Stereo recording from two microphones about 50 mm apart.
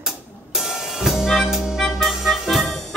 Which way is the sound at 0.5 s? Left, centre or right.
Centre.